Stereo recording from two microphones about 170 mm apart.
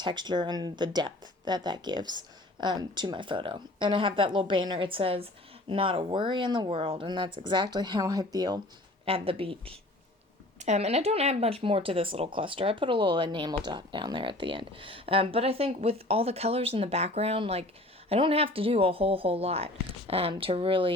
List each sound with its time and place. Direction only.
0.0 s speech: 25° right (ahead or behind)
9.0 s speech: 35° right (ahead or behind)